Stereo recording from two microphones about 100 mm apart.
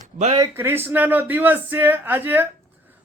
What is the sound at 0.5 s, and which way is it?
A man's voice, 20° right (ahead or behind).